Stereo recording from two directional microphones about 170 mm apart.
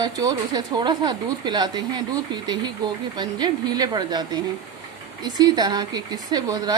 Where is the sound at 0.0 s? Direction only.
20° right (ahead or behind).